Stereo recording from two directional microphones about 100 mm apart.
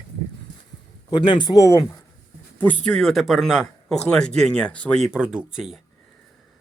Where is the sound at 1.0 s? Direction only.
50° left (ahead or behind).